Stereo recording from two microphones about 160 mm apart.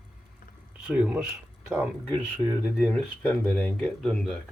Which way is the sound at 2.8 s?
5° left (ahead or behind).